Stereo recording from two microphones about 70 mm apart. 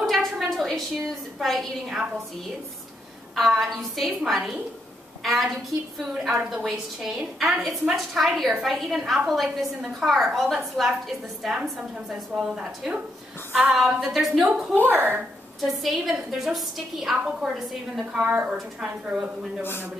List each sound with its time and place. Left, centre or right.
0.0 s a sound: centre
3.3 s a woman's voice: centre
14.9 s speech: right
15.6 s a woman's voice: centre
18.1 s a woman's voice: centre
19.6 s a man's voice: left